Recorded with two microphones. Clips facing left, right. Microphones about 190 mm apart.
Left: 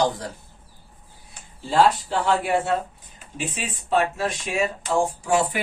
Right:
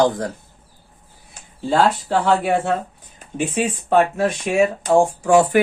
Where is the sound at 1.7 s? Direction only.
60° right (ahead or behind).